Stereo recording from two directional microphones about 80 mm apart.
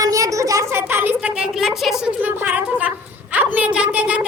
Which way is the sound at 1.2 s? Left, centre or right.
Centre.